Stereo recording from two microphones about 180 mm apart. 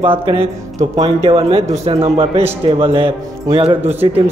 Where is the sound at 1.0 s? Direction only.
30° right (ahead or behind).